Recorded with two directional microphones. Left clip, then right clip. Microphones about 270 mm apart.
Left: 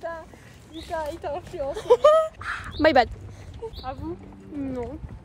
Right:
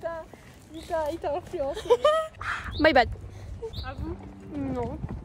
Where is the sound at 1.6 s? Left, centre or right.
Centre.